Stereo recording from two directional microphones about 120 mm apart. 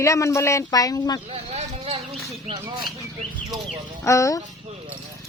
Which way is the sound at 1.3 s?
60° right (ahead or behind).